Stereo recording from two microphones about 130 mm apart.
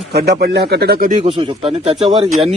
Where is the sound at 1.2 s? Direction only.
45° right (ahead or behind).